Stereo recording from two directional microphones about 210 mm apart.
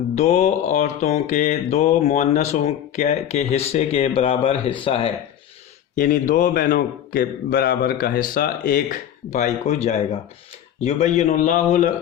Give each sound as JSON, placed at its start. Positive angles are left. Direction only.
{"t": 0.2, "sound": "mantra", "side_deg": 30}
{"t": 6.0, "sound": "mantra", "side_deg": 40}